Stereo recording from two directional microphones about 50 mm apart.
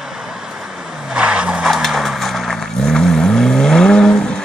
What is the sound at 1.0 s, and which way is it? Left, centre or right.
Vehicle, right.